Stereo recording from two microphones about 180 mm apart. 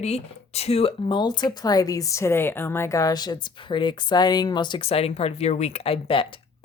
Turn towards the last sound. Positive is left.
turn(degrees=30)  # may be behind; listen again after turning